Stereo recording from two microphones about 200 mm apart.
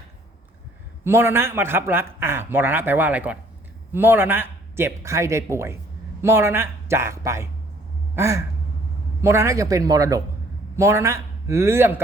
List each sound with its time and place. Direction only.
1.0 s a man's voice: 10° right (ahead or behind)